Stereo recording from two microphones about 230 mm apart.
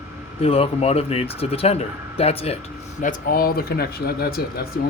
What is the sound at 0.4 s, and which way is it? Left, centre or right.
Speech, left.